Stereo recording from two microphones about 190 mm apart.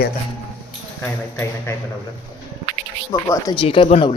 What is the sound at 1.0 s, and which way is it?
Speech, 15° left (ahead or behind).